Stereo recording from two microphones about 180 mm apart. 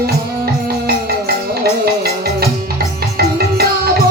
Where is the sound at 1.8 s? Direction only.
60° right (ahead or behind).